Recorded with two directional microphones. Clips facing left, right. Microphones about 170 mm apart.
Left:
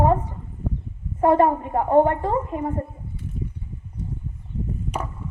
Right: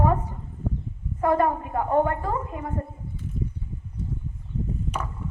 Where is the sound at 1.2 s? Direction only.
30° left (ahead or behind).